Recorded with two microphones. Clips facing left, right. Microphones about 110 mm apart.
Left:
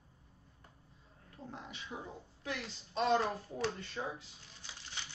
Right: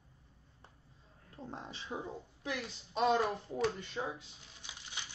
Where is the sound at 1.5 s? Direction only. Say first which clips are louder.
Right 3 dB; 30° right (ahead or behind).